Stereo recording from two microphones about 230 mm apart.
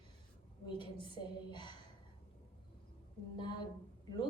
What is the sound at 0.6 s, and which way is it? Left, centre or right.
A woman's voice, left.